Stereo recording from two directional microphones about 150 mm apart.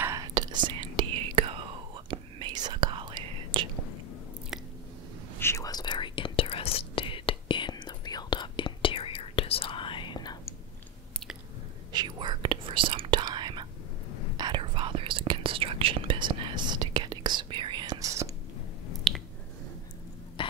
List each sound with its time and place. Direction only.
0.0 s whispering: 25° right (ahead or behind)
5.4 s whispering: 20° left (ahead or behind)
11.9 s whispering: 30° right (ahead or behind)
19.1 s squish: centre (ahead or behind)
20.4 s throat clearing: 35° left (ahead or behind)